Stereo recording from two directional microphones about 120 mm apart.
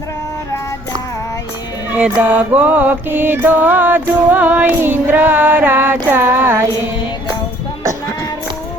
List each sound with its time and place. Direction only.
2.0 s music: 10° right (ahead or behind)